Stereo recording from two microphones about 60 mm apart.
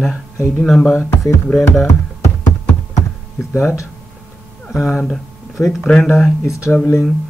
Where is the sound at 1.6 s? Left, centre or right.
Left.